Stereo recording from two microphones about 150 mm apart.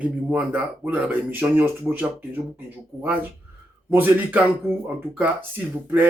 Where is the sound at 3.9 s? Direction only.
10° right (ahead or behind).